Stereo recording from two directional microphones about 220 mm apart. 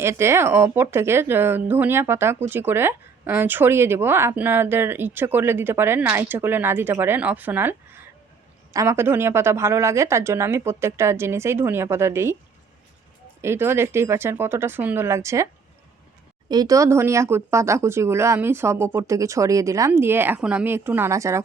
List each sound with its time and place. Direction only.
0.0 s a woman's voice: 10° right (ahead or behind)
13.4 s a woman's voice: 10° right (ahead or behind)
16.5 s a woman's voice: 15° right (ahead or behind)